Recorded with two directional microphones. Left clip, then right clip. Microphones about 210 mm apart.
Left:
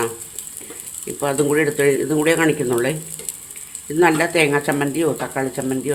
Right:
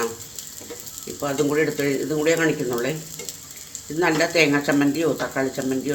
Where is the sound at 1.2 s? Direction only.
30° left (ahead or behind).